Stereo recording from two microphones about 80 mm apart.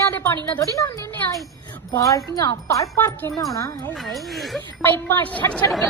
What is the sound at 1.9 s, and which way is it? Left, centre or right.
Music, left.